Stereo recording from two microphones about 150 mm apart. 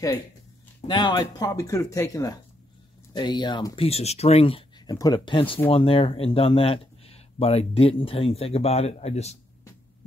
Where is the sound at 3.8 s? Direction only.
45° left (ahead or behind).